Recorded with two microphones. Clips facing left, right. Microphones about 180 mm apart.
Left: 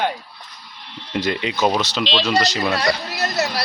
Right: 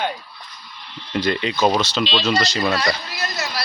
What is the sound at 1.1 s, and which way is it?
Speech, 10° left (ahead or behind).